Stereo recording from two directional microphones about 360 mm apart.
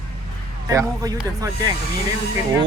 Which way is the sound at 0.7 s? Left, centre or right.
Centre.